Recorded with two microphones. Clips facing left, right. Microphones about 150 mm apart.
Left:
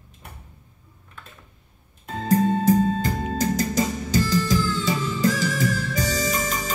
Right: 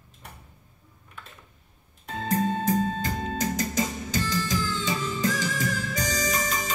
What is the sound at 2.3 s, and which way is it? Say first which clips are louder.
Music: left 6 dB; 35° left (ahead or behind).